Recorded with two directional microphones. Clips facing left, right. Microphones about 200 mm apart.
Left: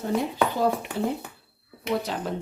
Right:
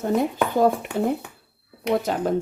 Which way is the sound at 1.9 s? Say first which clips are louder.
Right 5 dB; 50° right (ahead or behind).